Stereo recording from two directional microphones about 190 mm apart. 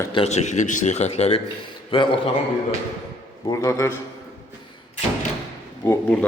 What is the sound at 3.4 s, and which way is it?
Speech, 15° left (ahead or behind).